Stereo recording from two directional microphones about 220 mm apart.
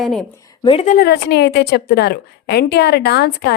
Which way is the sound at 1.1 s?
50° left (ahead or behind).